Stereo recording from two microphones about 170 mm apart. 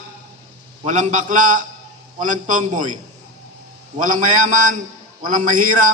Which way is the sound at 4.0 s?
50° right (ahead or behind).